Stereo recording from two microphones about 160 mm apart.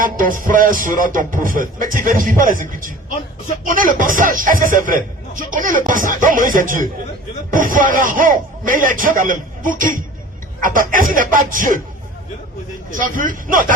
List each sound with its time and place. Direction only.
0.0 s speech: 60° right (ahead or behind)
12.9 s speech: 55° right (ahead or behind)